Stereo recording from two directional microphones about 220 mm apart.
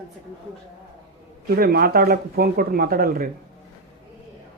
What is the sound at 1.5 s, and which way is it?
Speech, 45° right (ahead or behind).